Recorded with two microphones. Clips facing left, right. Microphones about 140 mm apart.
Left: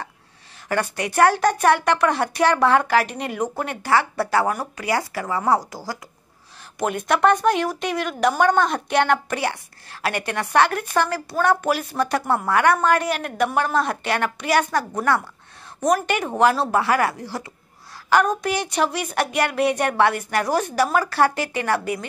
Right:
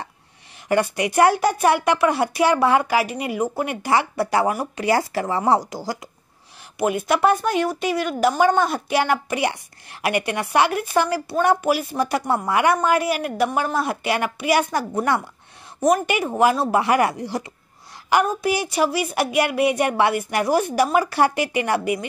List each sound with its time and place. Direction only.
0.7 s a woman's voice: 15° right (ahead or behind)
4.7 s speech: 25° right (ahead or behind)
6.8 s a woman's voice: 5° right (ahead or behind)
18.1 s a woman's voice: 5° right (ahead or behind)